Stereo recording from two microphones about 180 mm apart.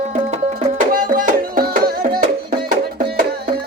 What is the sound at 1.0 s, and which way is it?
Music, 50° right (ahead or behind).